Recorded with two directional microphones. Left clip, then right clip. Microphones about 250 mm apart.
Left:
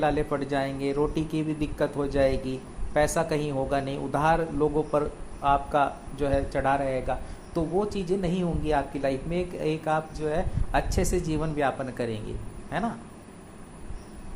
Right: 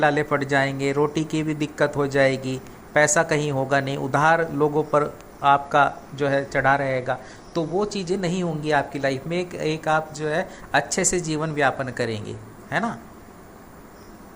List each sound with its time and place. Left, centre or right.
0.0 s speech: centre